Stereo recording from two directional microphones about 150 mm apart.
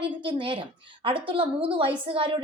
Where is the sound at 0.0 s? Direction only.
35° right (ahead or behind).